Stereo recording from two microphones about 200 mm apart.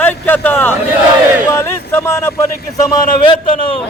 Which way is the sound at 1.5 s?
15° left (ahead or behind).